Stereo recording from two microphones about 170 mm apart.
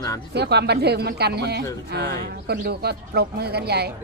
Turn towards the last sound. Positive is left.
turn(degrees=-70)  # may be behind; listen again after turning